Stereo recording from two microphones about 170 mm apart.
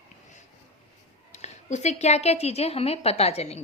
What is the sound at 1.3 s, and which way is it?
A woman's voice, 40° left (ahead or behind).